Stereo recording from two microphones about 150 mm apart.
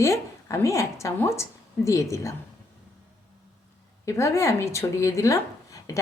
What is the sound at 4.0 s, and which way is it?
Speech, 20° left (ahead or behind).